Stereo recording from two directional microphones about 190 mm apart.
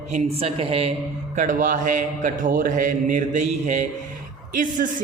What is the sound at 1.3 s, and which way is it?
A woman's voice, 45° right (ahead or behind).